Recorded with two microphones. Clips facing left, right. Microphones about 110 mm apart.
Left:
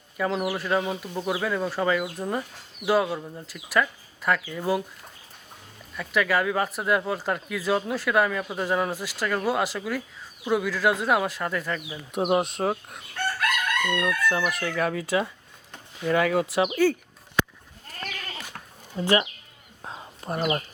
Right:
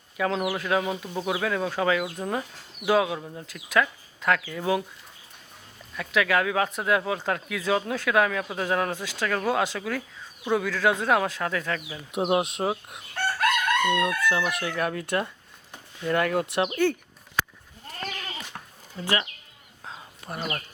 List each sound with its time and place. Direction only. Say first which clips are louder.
0.2 s speech: even; centre (ahead or behind)
6.0 s speech: even; centre (ahead or behind)
18.9 s speech: left 5 dB; 20° left (ahead or behind)
19.9 s a sound: left 5 dB; 30° left (ahead or behind)
20.4 s speech: left 7 dB; 20° left (ahead or behind)